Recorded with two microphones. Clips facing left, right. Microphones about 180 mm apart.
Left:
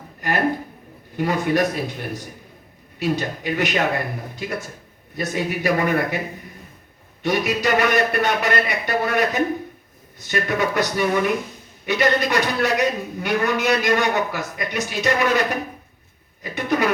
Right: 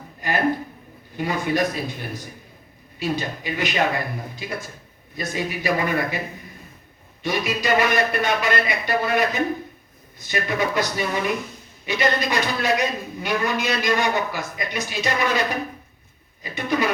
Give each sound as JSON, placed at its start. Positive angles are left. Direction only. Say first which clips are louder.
{"t": 0.2, "sound": "a sound", "louder": "left 1 dB", "side_deg": 65}
{"t": 1.1, "sound": "speech", "louder": "left 3 dB", "side_deg": 60}
{"t": 7.2, "sound": "speech", "louder": "left 3 dB", "side_deg": 65}
{"t": 10.2, "sound": "speech", "louder": "left 2 dB", "side_deg": 55}